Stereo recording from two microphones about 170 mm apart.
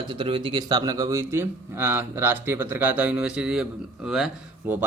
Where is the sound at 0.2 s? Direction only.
30° right (ahead or behind); by 3.7 s 5° right (ahead or behind).